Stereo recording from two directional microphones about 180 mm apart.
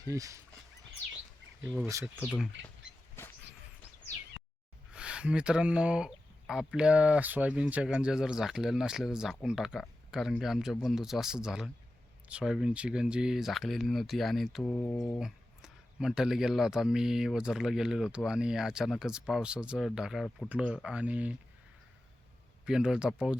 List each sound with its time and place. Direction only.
0.0 s speech: 20° right (ahead or behind)
2.2 s speech: centre (ahead or behind)
4.9 s speech: 5° right (ahead or behind)
14.6 s speech: 10° left (ahead or behind)
15.2 s speech: centre (ahead or behind)
22.6 s speech: 5° right (ahead or behind)